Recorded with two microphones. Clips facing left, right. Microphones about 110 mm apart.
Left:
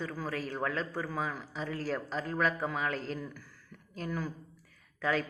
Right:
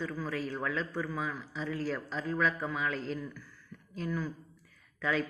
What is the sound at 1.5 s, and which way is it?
A man's voice, 60° left (ahead or behind).